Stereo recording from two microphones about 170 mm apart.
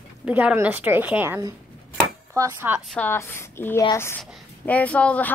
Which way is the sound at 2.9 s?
10° left (ahead or behind).